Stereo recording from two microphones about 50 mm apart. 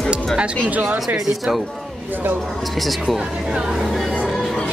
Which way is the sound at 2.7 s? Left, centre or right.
Centre.